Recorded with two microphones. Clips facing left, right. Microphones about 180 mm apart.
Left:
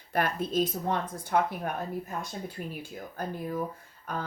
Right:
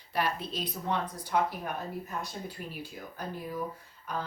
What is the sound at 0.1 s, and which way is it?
Speech, 50° left (ahead or behind).